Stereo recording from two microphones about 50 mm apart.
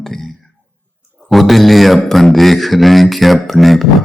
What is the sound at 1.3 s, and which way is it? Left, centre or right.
Speech, centre.